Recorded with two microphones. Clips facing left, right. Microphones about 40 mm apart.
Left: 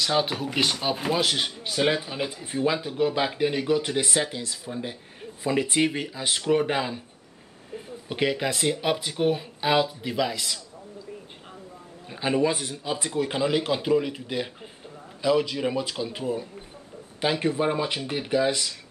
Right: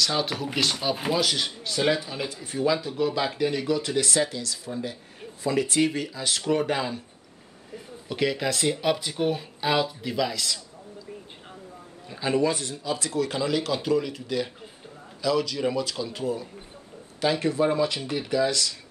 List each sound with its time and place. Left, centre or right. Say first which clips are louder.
0.0 s speech: left 2 dB; centre
8.5 s speech: even; centre
12.1 s speech: even; left